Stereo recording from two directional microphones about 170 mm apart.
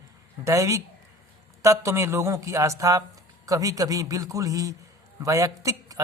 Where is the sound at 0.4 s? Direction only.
15° right (ahead or behind).